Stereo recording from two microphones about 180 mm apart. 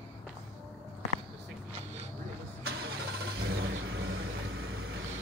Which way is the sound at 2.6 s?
65° right (ahead or behind).